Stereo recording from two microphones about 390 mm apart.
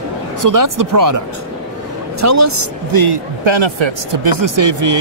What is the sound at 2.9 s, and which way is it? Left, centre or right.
Speech, right.